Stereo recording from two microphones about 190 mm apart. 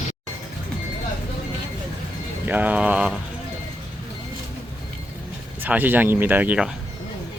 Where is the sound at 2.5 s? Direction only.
10° right (ahead or behind).